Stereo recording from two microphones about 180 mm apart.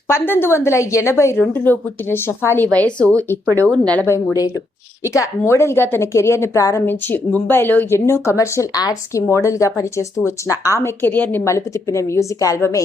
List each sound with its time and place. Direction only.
0.1 s a woman's voice: 10° left (ahead or behind)